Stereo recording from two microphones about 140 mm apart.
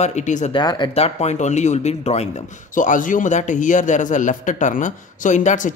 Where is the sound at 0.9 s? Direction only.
50° left (ahead or behind).